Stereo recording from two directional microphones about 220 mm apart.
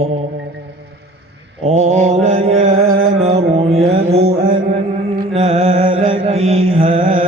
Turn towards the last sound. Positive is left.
turn(degrees=-30)  # may be behind; listen again after turning